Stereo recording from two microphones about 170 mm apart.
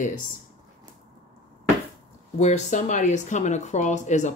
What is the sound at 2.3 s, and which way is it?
A woman's voice, 45° left (ahead or behind).